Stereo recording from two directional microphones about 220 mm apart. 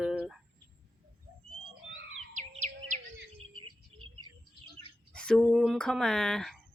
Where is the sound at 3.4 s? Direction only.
25° right (ahead or behind).